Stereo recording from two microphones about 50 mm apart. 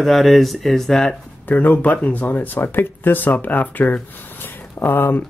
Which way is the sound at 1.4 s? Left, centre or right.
Left.